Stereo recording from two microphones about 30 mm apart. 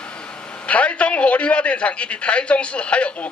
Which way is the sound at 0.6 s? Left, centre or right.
Left.